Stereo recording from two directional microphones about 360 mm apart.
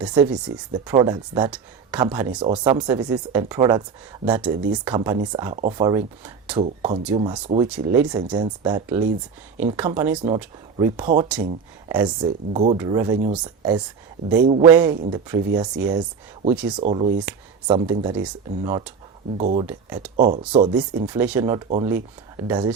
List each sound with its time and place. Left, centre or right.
0.0 s speech: centre
14.7 s speech: centre
16.6 s speech: centre
16.8 s speech: centre
19.4 s speech: centre
19.6 s speech: centre
20.1 s speech: right
21.0 s speech: centre